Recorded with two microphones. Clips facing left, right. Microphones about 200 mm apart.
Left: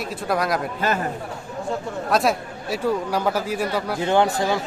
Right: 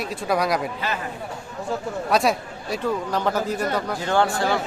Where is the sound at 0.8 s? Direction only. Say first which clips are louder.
Left 5 dB; 45° left (ahead or behind).